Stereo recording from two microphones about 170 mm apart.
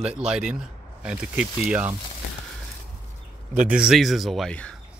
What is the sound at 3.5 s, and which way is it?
Speech, 5° right (ahead or behind).